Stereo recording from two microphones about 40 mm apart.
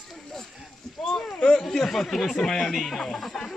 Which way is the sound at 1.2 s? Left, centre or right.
Centre.